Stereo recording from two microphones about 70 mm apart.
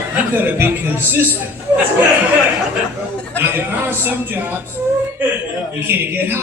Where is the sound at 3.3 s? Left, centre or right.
Right.